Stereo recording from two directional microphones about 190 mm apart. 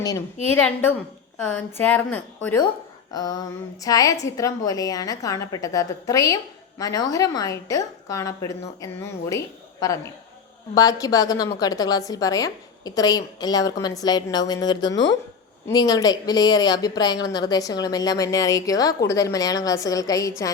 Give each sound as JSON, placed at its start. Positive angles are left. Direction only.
{"t": 1.4, "sound": "a woman's voice", "side_deg": 10}